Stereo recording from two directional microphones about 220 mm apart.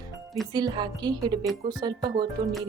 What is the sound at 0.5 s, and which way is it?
Speech, 20° right (ahead or behind).